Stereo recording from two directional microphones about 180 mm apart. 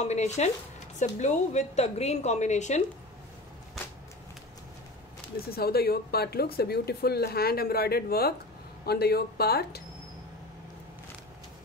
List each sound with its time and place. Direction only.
0.0 s a woman's voice: 40° left (ahead or behind)
5.5 s speech: 60° left (ahead or behind)